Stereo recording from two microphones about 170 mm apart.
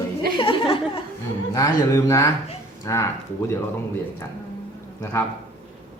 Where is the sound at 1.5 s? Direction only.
20° left (ahead or behind).